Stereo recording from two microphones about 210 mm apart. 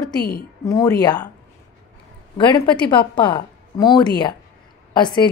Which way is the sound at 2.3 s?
20° left (ahead or behind).